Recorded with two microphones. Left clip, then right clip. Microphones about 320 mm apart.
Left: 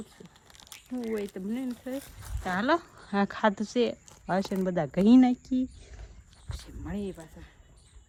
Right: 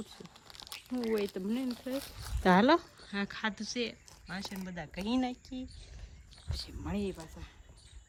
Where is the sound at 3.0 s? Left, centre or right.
Centre.